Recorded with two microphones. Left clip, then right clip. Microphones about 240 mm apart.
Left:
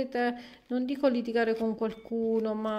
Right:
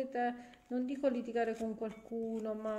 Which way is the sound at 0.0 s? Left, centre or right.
Left.